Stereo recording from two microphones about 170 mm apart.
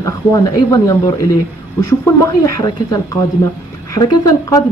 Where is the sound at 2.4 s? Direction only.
20° left (ahead or behind).